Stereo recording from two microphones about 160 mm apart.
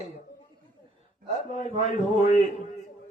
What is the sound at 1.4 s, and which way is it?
Speech, 50° left (ahead or behind).